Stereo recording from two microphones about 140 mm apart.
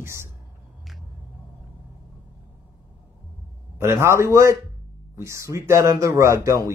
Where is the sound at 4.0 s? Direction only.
20° right (ahead or behind).